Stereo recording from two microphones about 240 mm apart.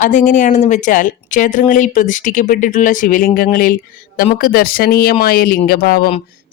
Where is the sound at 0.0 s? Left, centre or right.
Left.